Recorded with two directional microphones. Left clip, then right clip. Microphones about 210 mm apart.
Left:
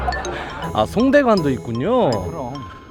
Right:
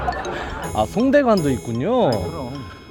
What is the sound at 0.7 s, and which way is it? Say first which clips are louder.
Speech: left 2 dB; 10° left (ahead or behind).